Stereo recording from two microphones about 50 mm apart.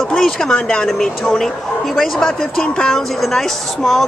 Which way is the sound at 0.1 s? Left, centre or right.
Centre.